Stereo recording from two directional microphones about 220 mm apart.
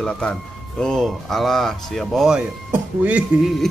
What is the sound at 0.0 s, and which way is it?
Speech, 5° left (ahead or behind).